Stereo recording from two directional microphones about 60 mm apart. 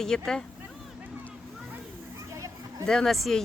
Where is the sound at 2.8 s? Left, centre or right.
Centre.